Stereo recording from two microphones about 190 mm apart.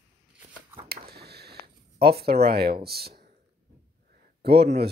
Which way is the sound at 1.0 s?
55° right (ahead or behind).